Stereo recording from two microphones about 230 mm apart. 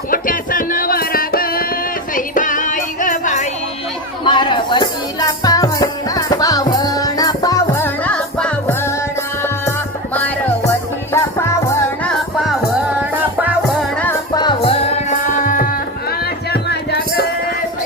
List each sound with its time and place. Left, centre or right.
0.1 s music: left
4.2 s music: left
10.2 s music: centre
12.4 s music: centre
14.0 s music: centre; by 17.2 s left